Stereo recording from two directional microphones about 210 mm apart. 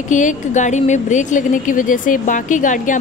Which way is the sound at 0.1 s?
35° left (ahead or behind).